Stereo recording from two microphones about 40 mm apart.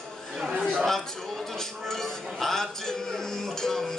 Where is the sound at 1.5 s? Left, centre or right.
Centre.